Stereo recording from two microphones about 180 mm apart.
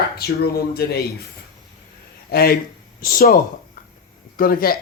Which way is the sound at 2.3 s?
60° left (ahead or behind).